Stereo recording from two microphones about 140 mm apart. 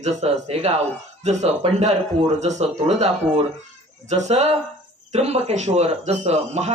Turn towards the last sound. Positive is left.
turn(degrees=-50)  # may be behind; listen again after turning